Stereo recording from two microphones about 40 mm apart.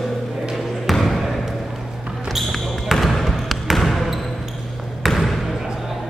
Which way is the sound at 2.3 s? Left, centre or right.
Centre.